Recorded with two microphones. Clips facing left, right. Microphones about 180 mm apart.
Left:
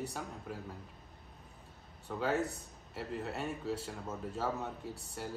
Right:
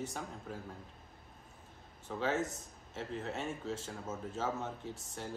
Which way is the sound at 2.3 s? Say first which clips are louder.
Left 1 dB; 35° left (ahead or behind).